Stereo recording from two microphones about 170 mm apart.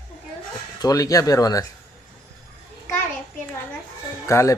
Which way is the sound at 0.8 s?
20° left (ahead or behind).